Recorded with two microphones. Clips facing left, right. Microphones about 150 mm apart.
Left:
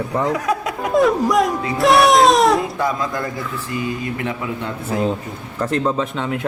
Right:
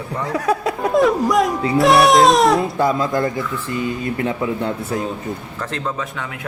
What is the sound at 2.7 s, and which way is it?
Speech, 30° right (ahead or behind).